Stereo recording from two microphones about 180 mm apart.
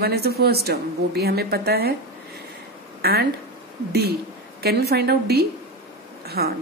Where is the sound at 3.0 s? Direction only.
60° right (ahead or behind).